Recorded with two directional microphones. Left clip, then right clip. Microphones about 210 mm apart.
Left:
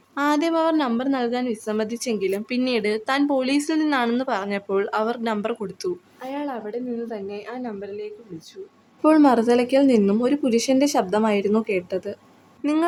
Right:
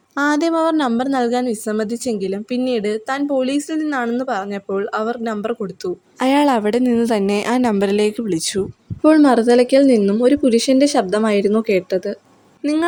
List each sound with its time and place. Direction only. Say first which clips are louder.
0.2 s a woman's voice: right 4 dB; 30° right (ahead or behind)
6.1 s a woman's voice: right 14 dB; 55° right (ahead or behind)
9.0 s speech: right 4 dB; 15° right (ahead or behind)